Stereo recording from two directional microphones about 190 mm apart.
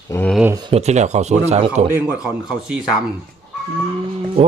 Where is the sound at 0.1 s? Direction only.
10° left (ahead or behind).